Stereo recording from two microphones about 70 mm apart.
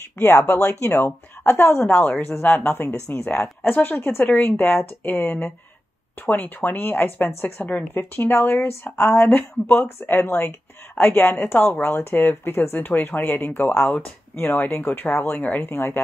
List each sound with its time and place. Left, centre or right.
0.2 s a woman's voice: left